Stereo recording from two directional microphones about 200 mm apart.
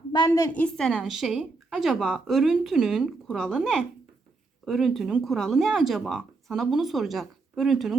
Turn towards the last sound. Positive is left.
turn(degrees=0)  # may be behind; listen again after turning